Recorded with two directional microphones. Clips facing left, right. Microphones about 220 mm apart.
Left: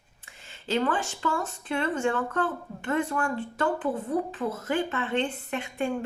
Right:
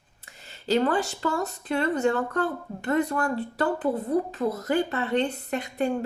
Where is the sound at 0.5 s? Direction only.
40° right (ahead or behind).